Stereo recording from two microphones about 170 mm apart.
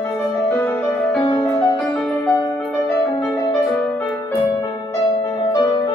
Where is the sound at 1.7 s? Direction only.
5° left (ahead or behind).